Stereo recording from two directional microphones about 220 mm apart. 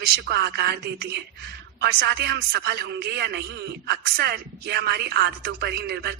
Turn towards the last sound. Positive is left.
turn(degrees=-45)  # may be behind; listen again after turning